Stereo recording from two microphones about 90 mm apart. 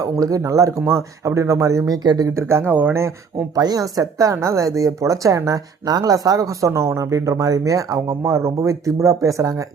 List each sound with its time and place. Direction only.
0.0 s speech: 40° right (ahead or behind)
2.0 s speech: 45° right (ahead or behind)
2.3 s speech: 30° right (ahead or behind)
3.5 s speech: 45° right (ahead or behind)